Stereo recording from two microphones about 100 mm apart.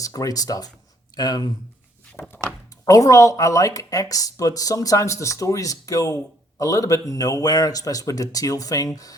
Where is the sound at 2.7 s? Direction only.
35° left (ahead or behind).